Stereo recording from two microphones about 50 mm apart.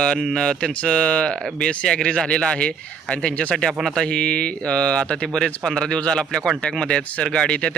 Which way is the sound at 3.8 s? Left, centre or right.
Centre.